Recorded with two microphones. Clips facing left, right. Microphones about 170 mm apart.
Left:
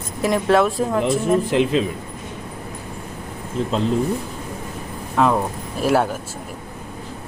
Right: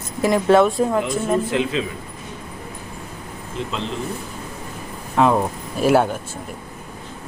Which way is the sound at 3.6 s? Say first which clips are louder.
Left 5 dB; 40° left (ahead or behind).